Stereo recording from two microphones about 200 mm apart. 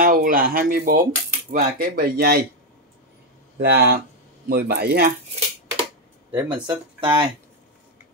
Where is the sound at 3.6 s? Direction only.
55° right (ahead or behind).